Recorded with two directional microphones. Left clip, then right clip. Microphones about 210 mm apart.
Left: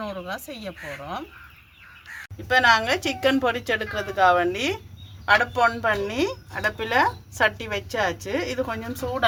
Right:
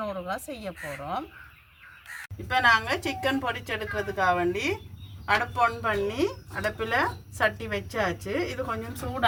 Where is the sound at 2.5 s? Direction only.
50° left (ahead or behind).